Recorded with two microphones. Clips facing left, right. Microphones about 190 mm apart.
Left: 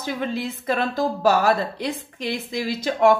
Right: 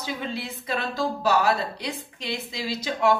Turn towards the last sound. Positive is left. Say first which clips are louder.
# left 5 dB
turn(degrees=50)  # may be behind; listen again after turning